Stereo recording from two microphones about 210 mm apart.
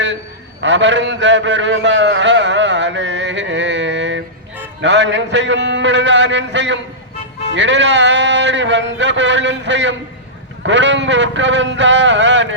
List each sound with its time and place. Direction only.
0.6 s a man's voice: 60° right (ahead or behind)